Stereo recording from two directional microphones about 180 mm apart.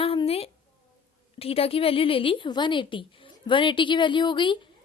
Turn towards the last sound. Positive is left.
turn(degrees=25)  # may be behind; listen again after turning